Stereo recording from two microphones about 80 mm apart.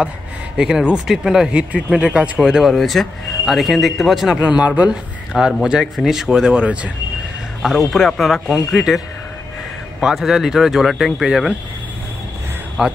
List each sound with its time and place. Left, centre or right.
0.6 s speech: centre
2.4 s speech: centre
4.4 s speech: centre
5.5 s speech: centre
7.9 s speech: centre